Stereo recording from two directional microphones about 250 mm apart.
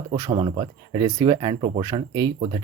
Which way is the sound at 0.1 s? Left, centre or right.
Centre.